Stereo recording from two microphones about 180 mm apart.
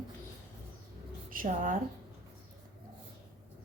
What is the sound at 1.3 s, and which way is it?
Speech, 50° right (ahead or behind).